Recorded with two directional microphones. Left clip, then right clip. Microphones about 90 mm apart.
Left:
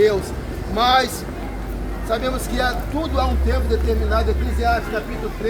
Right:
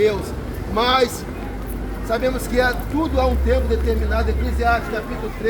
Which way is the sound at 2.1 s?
35° left (ahead or behind).